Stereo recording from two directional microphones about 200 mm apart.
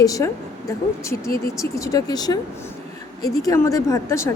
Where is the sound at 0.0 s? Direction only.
15° left (ahead or behind).